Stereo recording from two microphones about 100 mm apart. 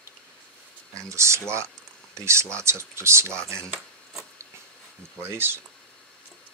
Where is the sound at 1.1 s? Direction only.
30° right (ahead or behind).